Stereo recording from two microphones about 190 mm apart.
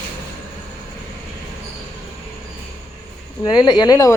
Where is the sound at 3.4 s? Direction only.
20° left (ahead or behind).